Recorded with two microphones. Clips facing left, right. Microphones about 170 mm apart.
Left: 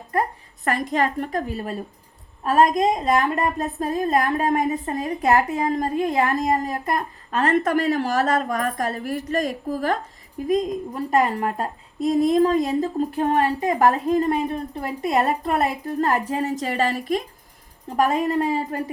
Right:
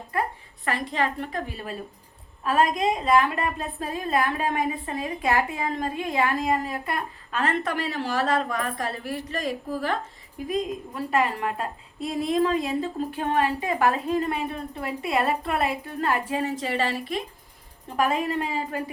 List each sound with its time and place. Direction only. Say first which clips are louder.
0.6 s a woman's voice: left 4 dB; 45° left (ahead or behind)